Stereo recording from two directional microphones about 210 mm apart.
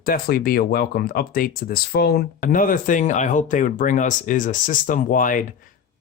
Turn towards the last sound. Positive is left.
turn(degrees=40)  # may be behind; listen again after turning